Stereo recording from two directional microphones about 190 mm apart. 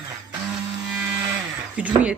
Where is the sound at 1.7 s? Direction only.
5° right (ahead or behind).